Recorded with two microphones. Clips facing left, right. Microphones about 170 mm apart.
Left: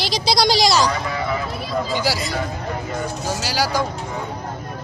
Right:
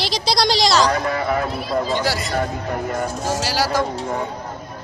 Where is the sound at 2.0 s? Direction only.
Centre (ahead or behind).